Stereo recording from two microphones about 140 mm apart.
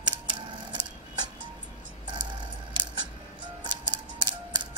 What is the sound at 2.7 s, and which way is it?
Scissors, 30° right (ahead or behind).